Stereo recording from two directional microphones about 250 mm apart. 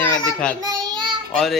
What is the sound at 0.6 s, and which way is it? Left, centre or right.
Child singing, centre.